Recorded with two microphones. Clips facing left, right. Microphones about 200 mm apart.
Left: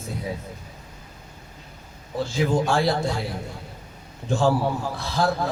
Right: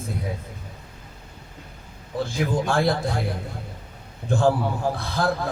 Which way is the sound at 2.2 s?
55° right (ahead or behind).